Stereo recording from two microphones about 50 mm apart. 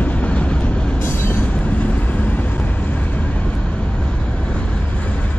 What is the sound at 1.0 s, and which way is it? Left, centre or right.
Train, left.